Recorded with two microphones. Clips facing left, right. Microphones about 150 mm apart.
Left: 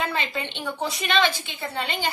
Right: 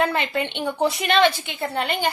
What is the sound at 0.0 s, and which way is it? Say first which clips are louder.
A woman's voice: right 6 dB; 60° right (ahead or behind).